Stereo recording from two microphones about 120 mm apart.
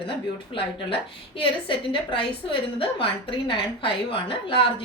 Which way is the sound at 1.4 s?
45° left (ahead or behind).